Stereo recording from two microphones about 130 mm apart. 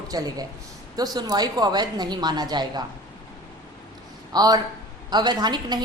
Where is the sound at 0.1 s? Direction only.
25° right (ahead or behind).